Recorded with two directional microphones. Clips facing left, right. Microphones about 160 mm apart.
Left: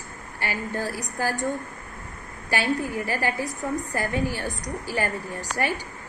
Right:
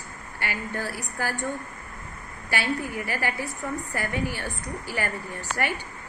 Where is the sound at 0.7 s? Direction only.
15° left (ahead or behind).